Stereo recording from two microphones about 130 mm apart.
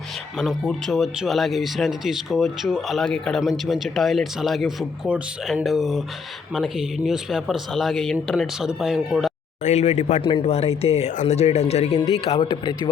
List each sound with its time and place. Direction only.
0.3 s speech: centre (ahead or behind)
9.6 s a man's voice: 55° left (ahead or behind); by 12.9 s 35° left (ahead or behind)